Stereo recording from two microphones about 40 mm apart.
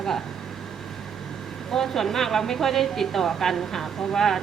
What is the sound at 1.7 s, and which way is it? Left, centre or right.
A woman's voice, centre.